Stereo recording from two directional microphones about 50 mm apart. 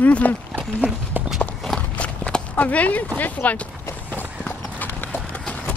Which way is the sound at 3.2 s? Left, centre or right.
Left.